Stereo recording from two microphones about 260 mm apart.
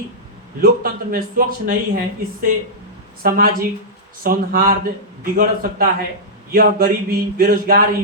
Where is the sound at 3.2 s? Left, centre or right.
Right.